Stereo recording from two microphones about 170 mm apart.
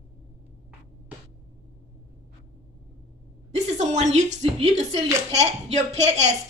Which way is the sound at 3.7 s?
40° right (ahead or behind).